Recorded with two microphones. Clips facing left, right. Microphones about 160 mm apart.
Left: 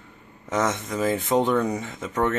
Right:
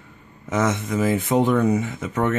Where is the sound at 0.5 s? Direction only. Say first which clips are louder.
Right 3 dB; 5° right (ahead or behind).